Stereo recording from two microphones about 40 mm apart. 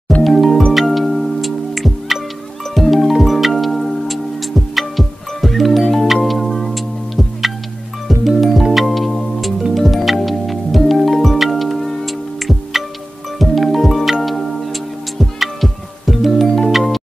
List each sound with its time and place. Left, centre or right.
0.2 s music: centre